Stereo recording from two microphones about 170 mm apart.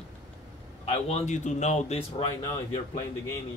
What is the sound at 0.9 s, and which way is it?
A man's voice, 40° left (ahead or behind).